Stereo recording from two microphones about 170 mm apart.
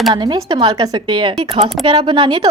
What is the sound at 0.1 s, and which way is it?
A woman's voice, 25° right (ahead or behind).